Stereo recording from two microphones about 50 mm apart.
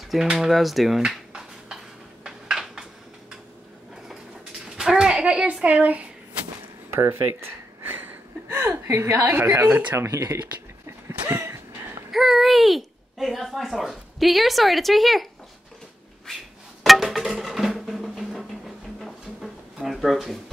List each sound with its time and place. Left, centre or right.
0.2 s speech: centre
2.2 s a sound: centre
4.7 s a child's voice: centre; by 6.0 s right
6.9 s gasp: right
9.3 s a woman's voice: right
9.9 s speech: right
10.9 s a sound: right
12.1 s speech: centre
16.3 s music: centre
16.8 s music: centre
18.9 s drawer open or close: centre